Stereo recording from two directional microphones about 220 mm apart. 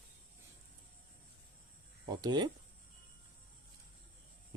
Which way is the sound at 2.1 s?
20° right (ahead or behind).